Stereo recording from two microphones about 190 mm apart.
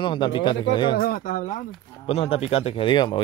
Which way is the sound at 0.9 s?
50° left (ahead or behind).